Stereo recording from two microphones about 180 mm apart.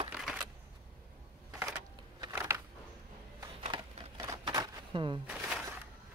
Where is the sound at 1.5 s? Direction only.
15° right (ahead or behind).